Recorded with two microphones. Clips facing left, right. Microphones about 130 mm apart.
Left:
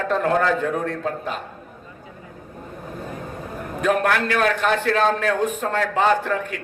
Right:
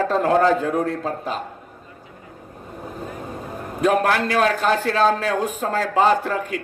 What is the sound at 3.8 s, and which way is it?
A man's voice, 35° right (ahead or behind).